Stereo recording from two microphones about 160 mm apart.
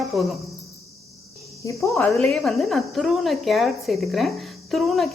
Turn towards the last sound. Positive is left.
turn(degrees=0)  # may be behind; listen again after turning